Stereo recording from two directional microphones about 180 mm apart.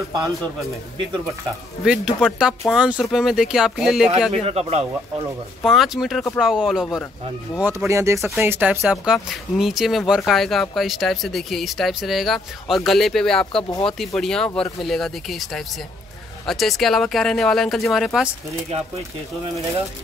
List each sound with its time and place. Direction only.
1.9 s speech: 5° right (ahead or behind)
4.3 s speech: 35° right (ahead or behind)
5.6 s speech: centre (ahead or behind)
7.6 s speech: 15° right (ahead or behind)